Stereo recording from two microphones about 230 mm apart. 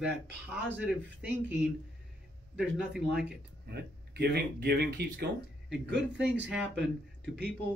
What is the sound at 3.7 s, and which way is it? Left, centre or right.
Speech, right.